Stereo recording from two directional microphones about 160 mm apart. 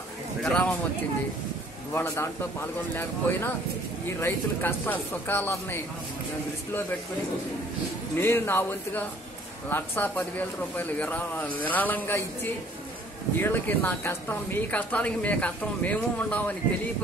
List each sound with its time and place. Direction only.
0.4 s speech: 10° left (ahead or behind)
2.0 s a woman's voice: 15° left (ahead or behind)
8.2 s a woman's voice: 15° left (ahead or behind)
13.4 s a woman's voice: 15° left (ahead or behind)